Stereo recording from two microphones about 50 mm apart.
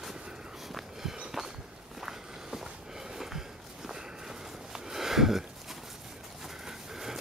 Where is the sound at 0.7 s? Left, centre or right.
Centre.